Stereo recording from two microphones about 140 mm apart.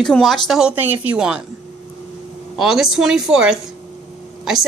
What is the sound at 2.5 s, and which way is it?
A woman's voice, centre (ahead or behind).